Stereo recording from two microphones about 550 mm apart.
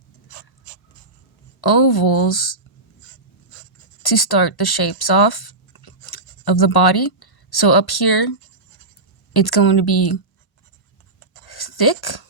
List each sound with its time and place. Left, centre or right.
1.6 s speech: left
4.0 s speech: left
9.3 s speech: left
11.4 s a sound: left